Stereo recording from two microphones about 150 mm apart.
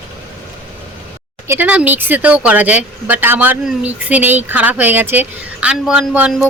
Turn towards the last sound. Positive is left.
turn(degrees=-10)  # may be behind; listen again after turning